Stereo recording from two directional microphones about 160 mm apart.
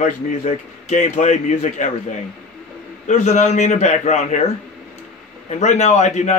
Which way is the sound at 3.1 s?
45° left (ahead or behind).